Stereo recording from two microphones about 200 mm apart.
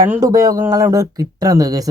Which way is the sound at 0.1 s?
15° right (ahead or behind).